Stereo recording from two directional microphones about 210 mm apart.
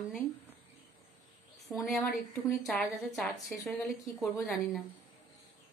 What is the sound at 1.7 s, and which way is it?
A woman's voice, centre (ahead or behind).